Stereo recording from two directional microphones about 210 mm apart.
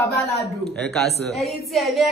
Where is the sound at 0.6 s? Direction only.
5° left (ahead or behind).